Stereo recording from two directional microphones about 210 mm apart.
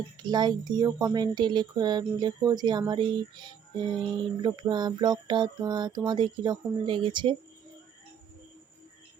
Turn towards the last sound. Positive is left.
turn(degrees=-25)  # may be behind; listen again after turning